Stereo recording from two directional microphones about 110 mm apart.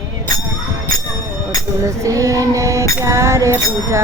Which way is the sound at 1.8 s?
30° right (ahead or behind).